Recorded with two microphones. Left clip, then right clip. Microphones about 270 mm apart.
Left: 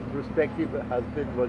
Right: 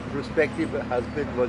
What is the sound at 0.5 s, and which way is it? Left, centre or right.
Speech, centre.